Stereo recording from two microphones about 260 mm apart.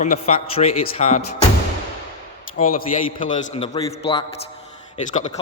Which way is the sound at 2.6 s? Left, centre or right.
Left.